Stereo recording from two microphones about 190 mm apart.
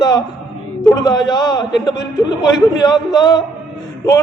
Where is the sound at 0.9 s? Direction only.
20° left (ahead or behind).